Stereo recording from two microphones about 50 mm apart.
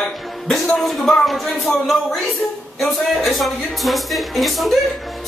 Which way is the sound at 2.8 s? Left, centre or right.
Centre.